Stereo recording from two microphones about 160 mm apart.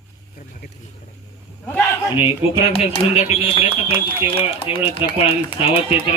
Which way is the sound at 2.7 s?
40° left (ahead or behind).